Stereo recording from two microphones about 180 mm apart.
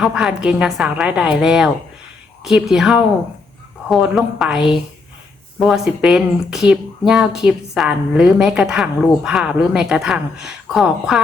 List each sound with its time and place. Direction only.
0.0 s speech: 5° right (ahead or behind)